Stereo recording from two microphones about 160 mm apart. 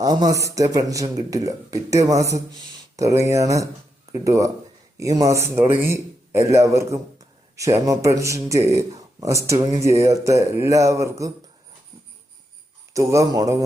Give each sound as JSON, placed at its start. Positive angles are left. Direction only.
{"t": 0.0, "sound": "a man's voice", "side_deg": -25}
{"t": 12.9, "sound": "a man's voice", "side_deg": -20}